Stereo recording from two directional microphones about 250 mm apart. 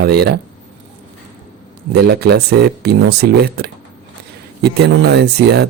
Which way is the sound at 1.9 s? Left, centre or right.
Right.